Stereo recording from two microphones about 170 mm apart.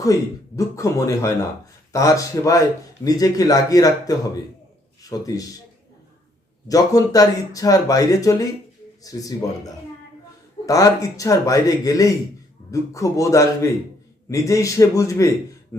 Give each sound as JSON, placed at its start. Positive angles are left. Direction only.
{"t": 0.0, "sound": "speech", "side_deg": 20}
{"t": 6.7, "sound": "speech", "side_deg": 20}